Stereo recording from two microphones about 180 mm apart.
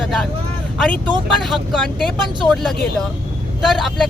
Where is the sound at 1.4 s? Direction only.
Centre (ahead or behind).